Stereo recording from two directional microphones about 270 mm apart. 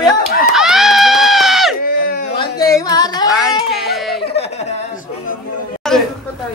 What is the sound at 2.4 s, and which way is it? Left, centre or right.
Carnatic music, centre.